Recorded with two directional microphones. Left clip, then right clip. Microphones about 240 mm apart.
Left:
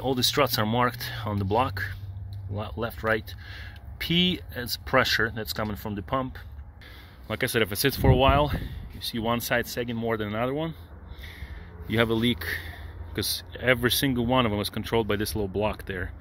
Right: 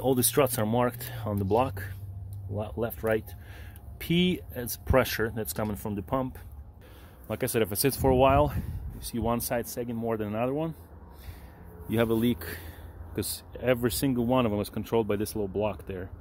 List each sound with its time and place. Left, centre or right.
0.0 s speech: centre
11.9 s speech: centre